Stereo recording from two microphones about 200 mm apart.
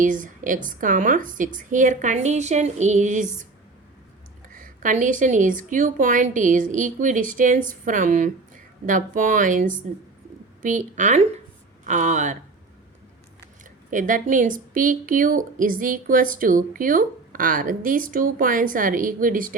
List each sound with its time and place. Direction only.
0.0 s speech: 40° right (ahead or behind)
4.4 s speech: 45° right (ahead or behind)
13.9 s a woman's voice: 40° right (ahead or behind)